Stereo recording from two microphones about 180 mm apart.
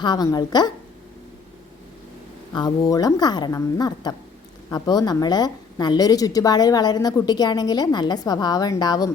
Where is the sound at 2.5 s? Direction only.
20° left (ahead or behind).